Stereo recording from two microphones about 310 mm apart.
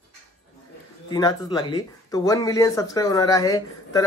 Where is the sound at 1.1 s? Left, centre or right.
Centre.